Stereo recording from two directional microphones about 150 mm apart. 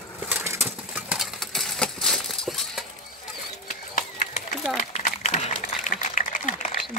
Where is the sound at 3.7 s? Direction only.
55° left (ahead or behind).